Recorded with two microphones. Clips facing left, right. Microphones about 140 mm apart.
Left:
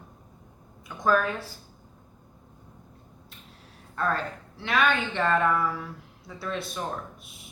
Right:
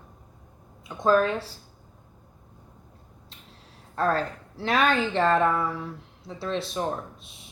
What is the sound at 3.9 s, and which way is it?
A woman's voice, 35° right (ahead or behind).